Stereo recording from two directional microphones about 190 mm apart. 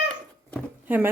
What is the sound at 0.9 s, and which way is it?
Speech, 10° right (ahead or behind).